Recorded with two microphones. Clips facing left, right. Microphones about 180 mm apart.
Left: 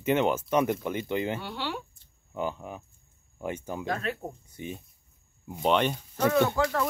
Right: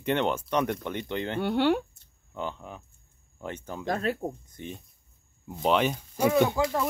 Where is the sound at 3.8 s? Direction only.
35° right (ahead or behind).